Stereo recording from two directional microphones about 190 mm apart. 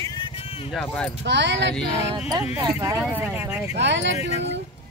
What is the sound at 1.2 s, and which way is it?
Speech, 70° right (ahead or behind).